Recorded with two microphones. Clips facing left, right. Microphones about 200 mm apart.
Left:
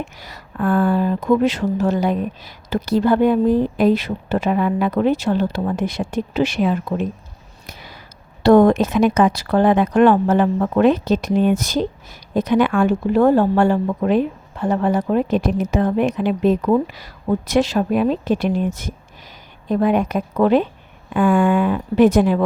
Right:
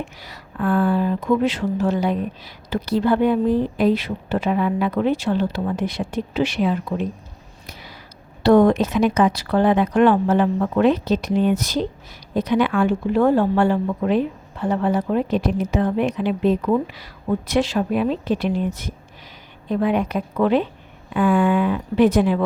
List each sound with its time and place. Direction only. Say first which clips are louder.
0.2 s speech: left 4 dB; 45° left (ahead or behind)
7.7 s a sound: left 1 dB; 50° left (ahead or behind)
8.4 s speech: left 2 dB; 45° left (ahead or behind)